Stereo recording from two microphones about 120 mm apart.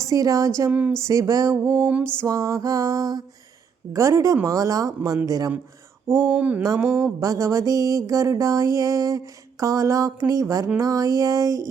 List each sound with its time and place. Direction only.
0.1 s music: 30° right (ahead or behind)
0.7 s a sound: 10° right (ahead or behind)
1.0 s music: 25° right (ahead or behind)
2.2 s music: 25° right (ahead or behind)
6.3 s a sound: 10° right (ahead or behind)
6.6 s music: 20° right (ahead or behind)